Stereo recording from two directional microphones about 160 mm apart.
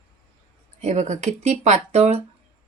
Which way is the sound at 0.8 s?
45° right (ahead or behind).